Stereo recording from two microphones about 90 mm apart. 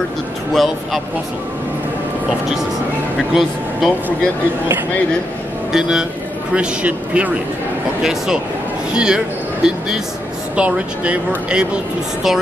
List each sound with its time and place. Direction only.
3.2 s speech: centre (ahead or behind)
5.7 s speech: 5° right (ahead or behind)
8.0 s speech: 5° right (ahead or behind)